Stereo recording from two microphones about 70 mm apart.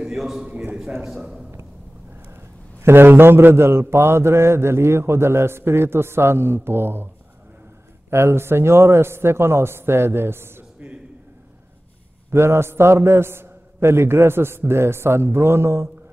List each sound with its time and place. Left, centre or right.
0.0 s a man's voice: centre
2.8 s mantra: right
8.1 s mantra: right
12.3 s mantra: right